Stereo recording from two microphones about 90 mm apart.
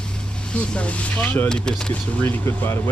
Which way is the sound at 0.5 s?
10° left (ahead or behind).